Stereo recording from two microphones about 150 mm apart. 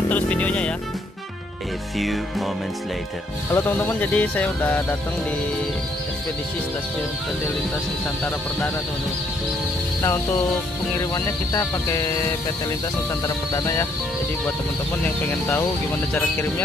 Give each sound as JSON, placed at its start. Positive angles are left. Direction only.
{"t": 0.1, "sound": "speech", "side_deg": 10}
{"t": 2.0, "sound": "music", "side_deg": 0}
{"t": 3.5, "sound": "speech", "side_deg": 15}
{"t": 10.0, "sound": "speech", "side_deg": 15}
{"t": 11.1, "sound": "music", "side_deg": 20}
{"t": 16.1, "sound": "speech", "side_deg": 10}